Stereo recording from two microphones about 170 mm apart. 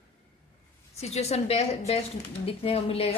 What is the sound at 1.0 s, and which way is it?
A woman's voice, 40° left (ahead or behind).